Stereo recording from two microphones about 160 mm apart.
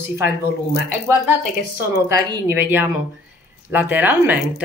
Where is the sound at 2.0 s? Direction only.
25° right (ahead or behind).